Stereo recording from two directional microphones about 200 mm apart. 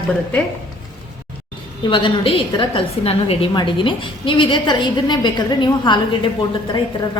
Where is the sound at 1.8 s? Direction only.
25° left (ahead or behind).